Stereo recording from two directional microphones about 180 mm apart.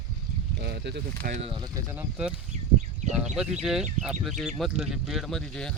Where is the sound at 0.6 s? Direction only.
65° right (ahead or behind).